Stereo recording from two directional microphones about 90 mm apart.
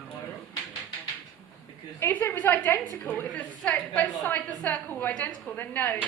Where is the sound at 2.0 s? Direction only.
25° left (ahead or behind).